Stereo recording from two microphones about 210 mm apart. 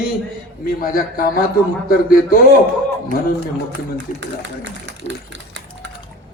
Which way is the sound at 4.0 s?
55° right (ahead or behind).